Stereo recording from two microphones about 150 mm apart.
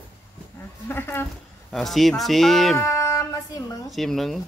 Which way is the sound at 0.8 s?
15° left (ahead or behind).